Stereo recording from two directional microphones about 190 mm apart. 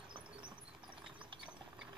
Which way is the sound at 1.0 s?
25° right (ahead or behind).